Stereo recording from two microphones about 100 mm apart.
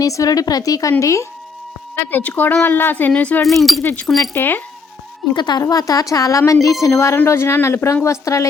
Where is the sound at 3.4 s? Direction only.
Centre (ahead or behind).